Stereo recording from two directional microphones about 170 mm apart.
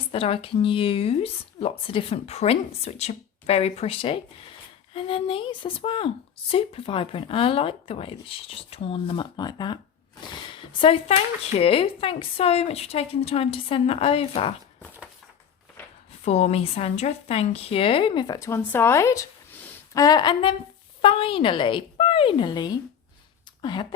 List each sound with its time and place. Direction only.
0.1 s a woman's voice: 35° left (ahead or behind)
16.2 s a woman's voice: 40° left (ahead or behind)